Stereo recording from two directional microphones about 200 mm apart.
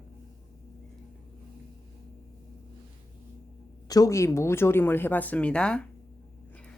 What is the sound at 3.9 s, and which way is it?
Speech, 15° left (ahead or behind).